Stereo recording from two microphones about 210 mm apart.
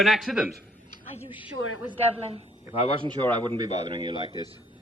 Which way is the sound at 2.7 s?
25° left (ahead or behind).